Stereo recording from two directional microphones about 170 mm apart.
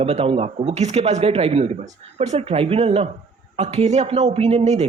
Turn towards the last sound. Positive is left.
turn(degrees=-40)  # may be behind; listen again after turning